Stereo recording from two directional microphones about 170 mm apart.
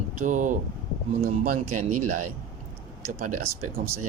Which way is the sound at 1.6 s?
50° right (ahead or behind).